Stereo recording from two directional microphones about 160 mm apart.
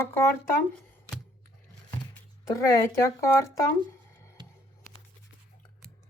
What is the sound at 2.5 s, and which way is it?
Speech, 20° left (ahead or behind).